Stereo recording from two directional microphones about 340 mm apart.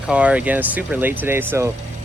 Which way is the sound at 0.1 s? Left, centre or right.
Centre.